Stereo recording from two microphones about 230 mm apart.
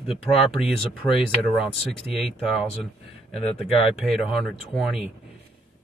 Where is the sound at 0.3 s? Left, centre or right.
Centre.